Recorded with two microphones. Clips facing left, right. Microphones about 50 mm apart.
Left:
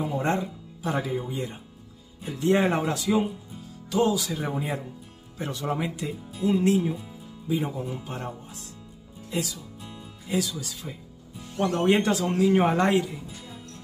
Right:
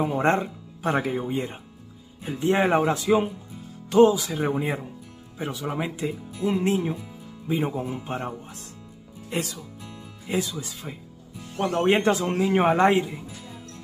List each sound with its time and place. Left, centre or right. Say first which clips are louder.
0.0 s speech: right 4 dB; right
2.2 s speech: right 1 dB; centre
5.4 s speech: even; centre; by 13.2 s right